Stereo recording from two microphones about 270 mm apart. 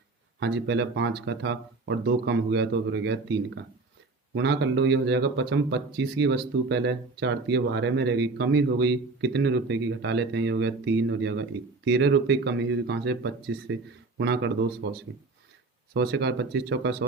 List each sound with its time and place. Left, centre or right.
0.3 s speech: right